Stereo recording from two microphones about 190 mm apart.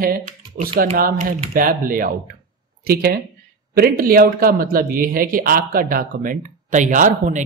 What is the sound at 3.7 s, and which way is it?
Speech, 50° right (ahead or behind).